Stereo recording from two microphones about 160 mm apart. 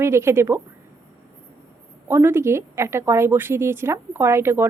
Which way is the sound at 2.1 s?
15° right (ahead or behind).